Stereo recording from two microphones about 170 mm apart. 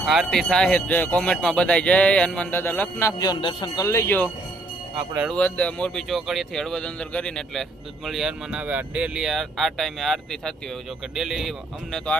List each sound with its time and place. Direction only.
0.0 s speech: centre (ahead or behind)
4.9 s speech: 10° right (ahead or behind)
5.3 s speech: 5° left (ahead or behind)